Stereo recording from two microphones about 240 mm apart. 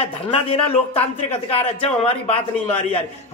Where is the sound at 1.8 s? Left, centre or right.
Left.